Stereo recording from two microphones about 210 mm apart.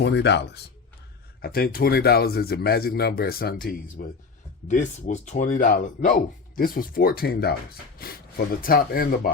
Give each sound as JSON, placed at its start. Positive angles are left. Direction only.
{"t": 0.0, "sound": "speech", "side_deg": 55}